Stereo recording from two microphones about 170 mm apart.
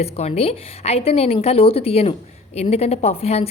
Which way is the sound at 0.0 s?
40° left (ahead or behind).